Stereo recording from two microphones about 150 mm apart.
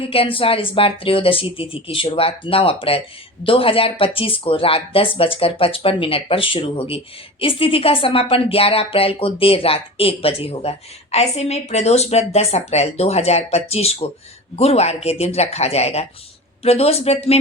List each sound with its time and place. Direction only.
0.0 s speech: 40° left (ahead or behind)